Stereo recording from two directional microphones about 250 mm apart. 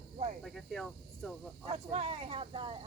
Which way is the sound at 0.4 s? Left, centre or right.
Centre.